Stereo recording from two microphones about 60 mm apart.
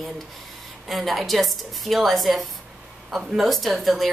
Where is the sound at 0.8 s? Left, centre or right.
Centre.